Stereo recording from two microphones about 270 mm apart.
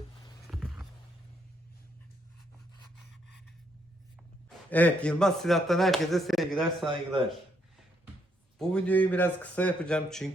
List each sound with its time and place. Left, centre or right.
0.5 s a sound: centre
4.4 s speech: centre
6.9 s speech: centre
8.5 s speech: centre